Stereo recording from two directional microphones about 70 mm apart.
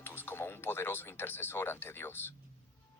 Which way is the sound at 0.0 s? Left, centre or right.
Left.